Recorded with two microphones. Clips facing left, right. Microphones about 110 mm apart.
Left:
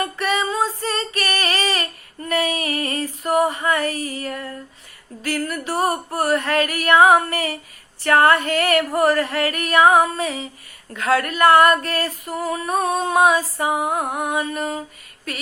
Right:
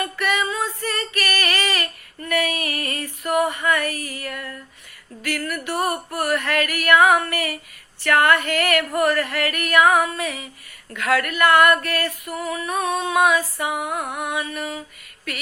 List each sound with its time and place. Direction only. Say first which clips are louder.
0.0 s female singing: left 1 dB; 30° left (ahead or behind)